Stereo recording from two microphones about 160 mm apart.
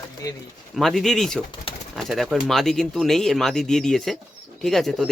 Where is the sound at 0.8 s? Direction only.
Centre (ahead or behind).